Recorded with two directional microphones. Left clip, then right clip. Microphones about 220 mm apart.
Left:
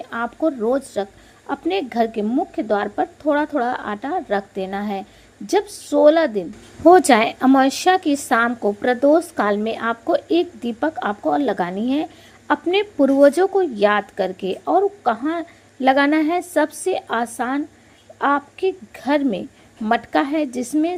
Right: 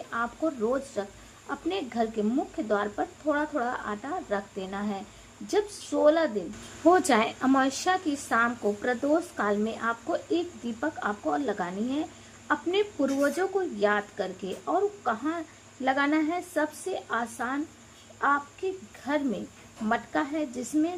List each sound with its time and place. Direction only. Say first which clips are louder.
0.1 s a woman's voice: left 8 dB; 30° left (ahead or behind)